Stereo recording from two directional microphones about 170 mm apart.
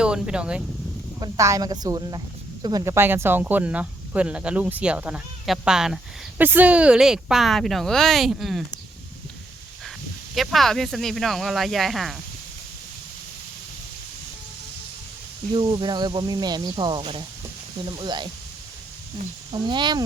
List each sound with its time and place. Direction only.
0.0 s speech: 5° right (ahead or behind)
1.2 s speech: 20° right (ahead or behind); by 8.6 s centre (ahead or behind)
10.3 s speech: centre (ahead or behind)
15.5 s speech: 25° right (ahead or behind)
19.5 s speech: 25° right (ahead or behind)